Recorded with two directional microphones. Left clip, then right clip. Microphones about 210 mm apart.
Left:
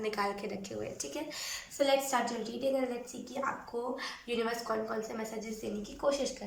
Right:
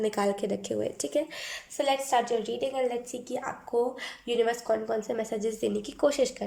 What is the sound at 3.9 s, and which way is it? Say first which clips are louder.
A woman's voice: right 7 dB; 35° right (ahead or behind).